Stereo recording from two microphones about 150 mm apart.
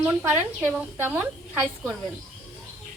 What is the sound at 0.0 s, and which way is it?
A woman's voice, 10° right (ahead or behind).